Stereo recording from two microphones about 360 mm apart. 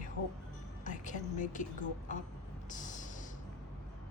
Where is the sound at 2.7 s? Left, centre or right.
Left.